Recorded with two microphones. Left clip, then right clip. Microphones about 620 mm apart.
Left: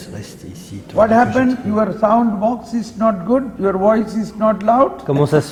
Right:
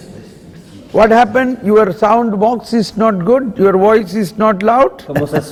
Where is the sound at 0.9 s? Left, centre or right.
Right.